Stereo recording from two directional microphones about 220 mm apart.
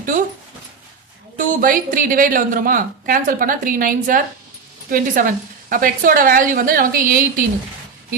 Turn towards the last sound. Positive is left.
turn(degrees=-40)  # may be behind; listen again after turning